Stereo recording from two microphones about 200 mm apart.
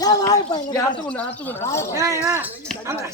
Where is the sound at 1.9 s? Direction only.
15° right (ahead or behind).